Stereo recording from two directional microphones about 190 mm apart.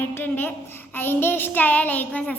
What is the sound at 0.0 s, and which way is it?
A child's voice, 10° left (ahead or behind).